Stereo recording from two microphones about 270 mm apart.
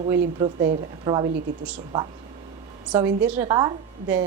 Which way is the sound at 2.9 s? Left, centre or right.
Centre.